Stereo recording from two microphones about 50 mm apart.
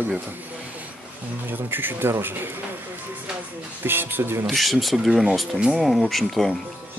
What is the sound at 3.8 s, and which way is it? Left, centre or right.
Speech, right.